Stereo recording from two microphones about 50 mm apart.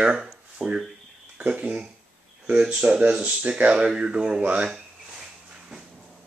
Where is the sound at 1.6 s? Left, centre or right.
Centre.